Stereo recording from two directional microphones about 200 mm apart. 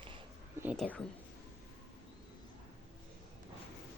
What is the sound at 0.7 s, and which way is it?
Speech, 5° left (ahead or behind).